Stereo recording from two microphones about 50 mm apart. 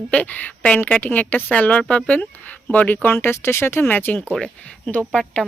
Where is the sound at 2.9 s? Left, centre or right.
Left.